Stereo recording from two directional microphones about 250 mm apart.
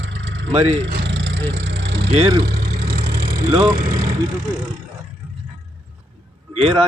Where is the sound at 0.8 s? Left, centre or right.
Right.